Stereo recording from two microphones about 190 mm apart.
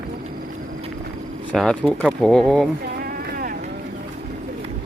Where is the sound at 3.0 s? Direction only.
50° right (ahead or behind).